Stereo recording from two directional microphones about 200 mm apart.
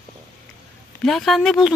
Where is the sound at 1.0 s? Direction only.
Centre (ahead or behind).